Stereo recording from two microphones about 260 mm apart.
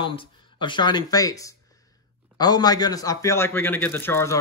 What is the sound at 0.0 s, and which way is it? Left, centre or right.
A man's voice, centre.